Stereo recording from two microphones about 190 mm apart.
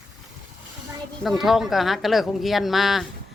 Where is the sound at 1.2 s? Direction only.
Centre (ahead or behind).